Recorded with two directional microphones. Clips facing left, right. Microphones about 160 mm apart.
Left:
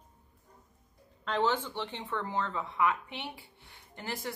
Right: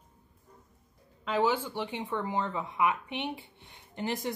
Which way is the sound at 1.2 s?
10° right (ahead or behind).